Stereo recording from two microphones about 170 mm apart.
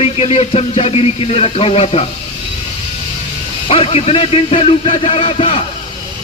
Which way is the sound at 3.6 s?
35° left (ahead or behind).